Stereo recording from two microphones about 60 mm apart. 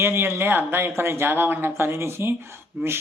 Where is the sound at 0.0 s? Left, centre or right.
Right.